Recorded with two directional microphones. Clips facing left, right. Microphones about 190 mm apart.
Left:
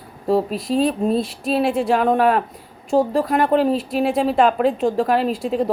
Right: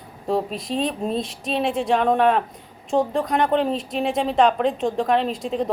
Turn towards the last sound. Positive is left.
turn(degrees=5)  # may be behind; listen again after turning